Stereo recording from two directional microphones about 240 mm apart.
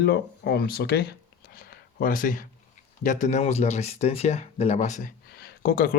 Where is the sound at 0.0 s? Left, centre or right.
Left.